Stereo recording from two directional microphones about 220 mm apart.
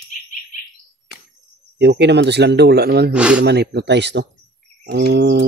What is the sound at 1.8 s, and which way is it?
Speech, 50° right (ahead or behind).